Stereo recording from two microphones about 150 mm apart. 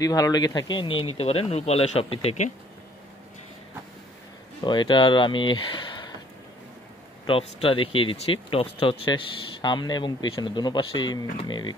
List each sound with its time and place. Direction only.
0.0 s speech: 25° left (ahead or behind); by 2.5 s 45° left (ahead or behind)
4.6 s speech: 30° left (ahead or behind)
7.2 s speech: 35° left (ahead or behind)